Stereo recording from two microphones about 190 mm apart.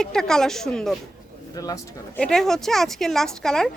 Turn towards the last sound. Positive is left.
turn(degrees=0)  # may be behind; listen again after turning